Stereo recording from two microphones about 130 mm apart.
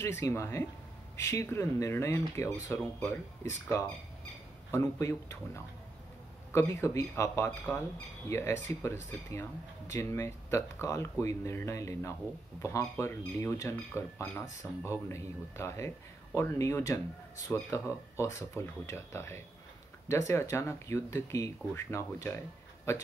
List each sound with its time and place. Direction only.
0.0 s speech: 20° left (ahead or behind)
4.6 s speech: 20° left (ahead or behind)